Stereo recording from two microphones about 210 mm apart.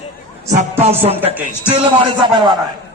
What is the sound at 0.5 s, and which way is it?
A man's voice, 35° right (ahead or behind).